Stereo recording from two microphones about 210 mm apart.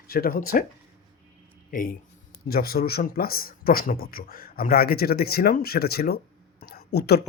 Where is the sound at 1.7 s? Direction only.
40° left (ahead or behind).